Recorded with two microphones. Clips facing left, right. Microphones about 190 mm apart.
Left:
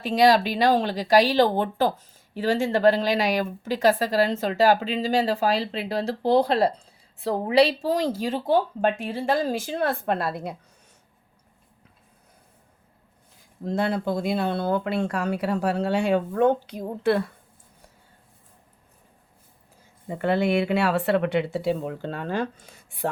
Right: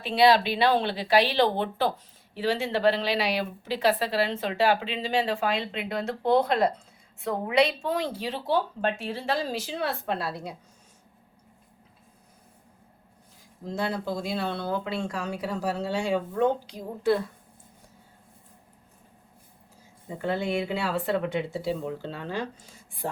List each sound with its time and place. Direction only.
0.0 s speech: 45° left (ahead or behind)
13.7 s speech: 55° left (ahead or behind)
20.1 s speech: 65° left (ahead or behind)